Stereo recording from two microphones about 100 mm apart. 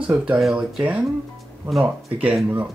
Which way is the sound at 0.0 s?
10° right (ahead or behind).